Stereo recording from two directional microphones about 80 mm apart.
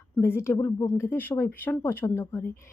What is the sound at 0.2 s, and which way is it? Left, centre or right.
A woman's voice, left.